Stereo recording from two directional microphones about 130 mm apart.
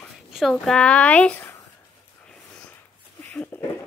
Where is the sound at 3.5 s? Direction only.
15° left (ahead or behind).